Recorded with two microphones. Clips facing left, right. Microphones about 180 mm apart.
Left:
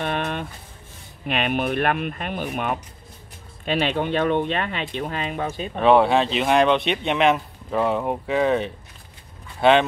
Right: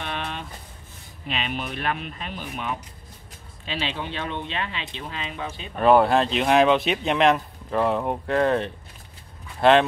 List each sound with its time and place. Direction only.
0.0 s a sound: 50° left (ahead or behind)
1.2 s speech: 55° left (ahead or behind)
5.8 s speech: centre (ahead or behind)